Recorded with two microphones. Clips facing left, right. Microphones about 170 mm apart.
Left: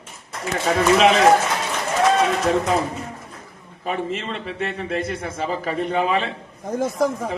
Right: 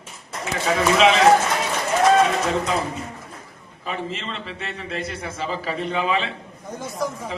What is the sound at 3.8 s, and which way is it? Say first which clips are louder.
A man's voice: left 4 dB; 50° left (ahead or behind).